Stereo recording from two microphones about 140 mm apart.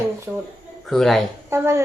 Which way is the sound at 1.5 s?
20° right (ahead or behind).